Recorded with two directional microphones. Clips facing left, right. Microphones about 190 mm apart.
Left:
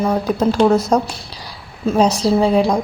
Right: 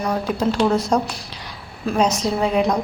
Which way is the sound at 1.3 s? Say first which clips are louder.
Left 1 dB; 35° left (ahead or behind).